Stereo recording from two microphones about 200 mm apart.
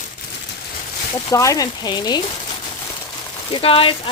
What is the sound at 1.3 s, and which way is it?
Speech, 15° left (ahead or behind).